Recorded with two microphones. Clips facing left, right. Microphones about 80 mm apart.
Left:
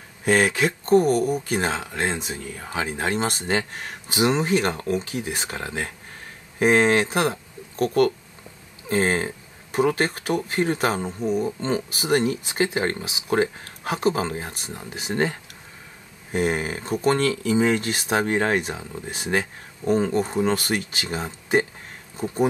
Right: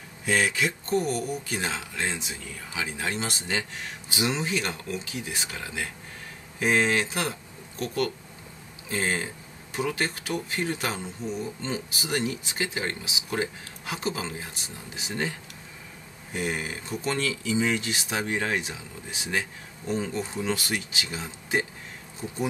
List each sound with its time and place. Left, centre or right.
0.2 s speech: left
16.3 s speech: left